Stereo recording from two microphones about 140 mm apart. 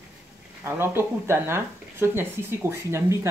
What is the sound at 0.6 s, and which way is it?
Speech, 15° right (ahead or behind).